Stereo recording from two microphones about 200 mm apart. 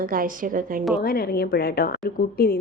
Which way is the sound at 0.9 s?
50° left (ahead or behind).